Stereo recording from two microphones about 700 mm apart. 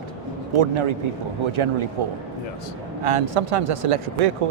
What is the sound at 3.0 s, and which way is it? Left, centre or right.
Speech, right.